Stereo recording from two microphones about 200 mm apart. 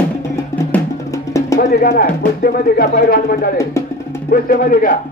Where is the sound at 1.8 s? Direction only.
50° left (ahead or behind).